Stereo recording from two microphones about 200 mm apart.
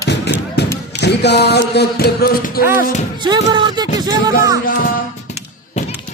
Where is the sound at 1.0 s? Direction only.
55° left (ahead or behind).